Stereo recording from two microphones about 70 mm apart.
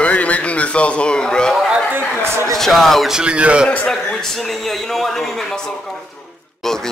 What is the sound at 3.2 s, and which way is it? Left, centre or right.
Speech, centre.